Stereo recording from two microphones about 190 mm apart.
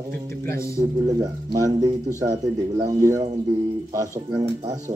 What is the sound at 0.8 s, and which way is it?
Speech, 20° right (ahead or behind).